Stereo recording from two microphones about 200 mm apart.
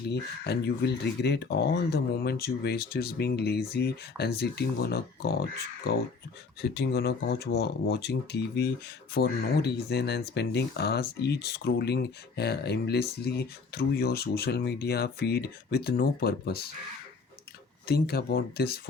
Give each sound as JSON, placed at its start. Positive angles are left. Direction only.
{"t": 0.1, "sound": "speech", "side_deg": 55}
{"t": 17.8, "sound": "speech", "side_deg": 50}